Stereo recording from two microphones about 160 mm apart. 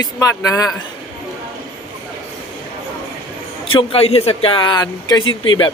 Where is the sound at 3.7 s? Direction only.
35° left (ahead or behind).